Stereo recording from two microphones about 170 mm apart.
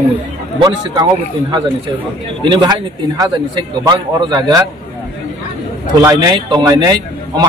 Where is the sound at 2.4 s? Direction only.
25° right (ahead or behind).